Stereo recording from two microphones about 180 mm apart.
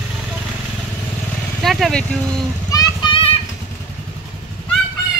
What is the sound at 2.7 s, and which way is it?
Vehicle, 25° left (ahead or behind).